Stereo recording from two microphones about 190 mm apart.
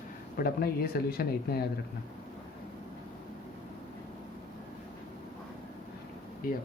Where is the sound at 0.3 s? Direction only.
55° left (ahead or behind).